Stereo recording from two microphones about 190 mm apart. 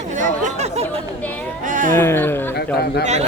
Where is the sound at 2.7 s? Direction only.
55° left (ahead or behind).